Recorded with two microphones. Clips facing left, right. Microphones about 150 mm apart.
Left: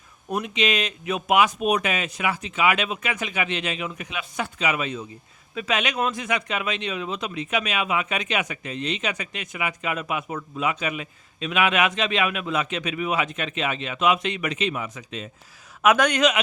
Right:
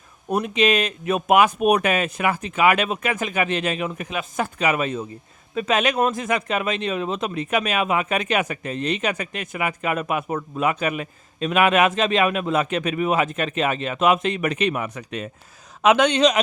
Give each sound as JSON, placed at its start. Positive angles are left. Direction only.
{"t": 0.3, "sound": "speech", "side_deg": -40}
{"t": 15.8, "sound": "a man's voice", "side_deg": -25}